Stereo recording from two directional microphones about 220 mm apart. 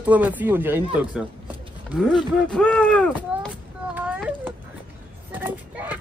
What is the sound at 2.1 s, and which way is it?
Speech, 5° left (ahead or behind).